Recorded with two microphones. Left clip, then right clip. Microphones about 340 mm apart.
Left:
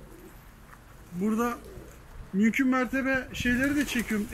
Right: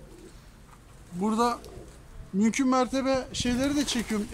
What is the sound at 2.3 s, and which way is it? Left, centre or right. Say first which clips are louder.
Speech: right 1 dB; centre.